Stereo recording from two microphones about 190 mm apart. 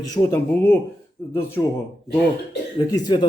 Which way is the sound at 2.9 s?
20° left (ahead or behind).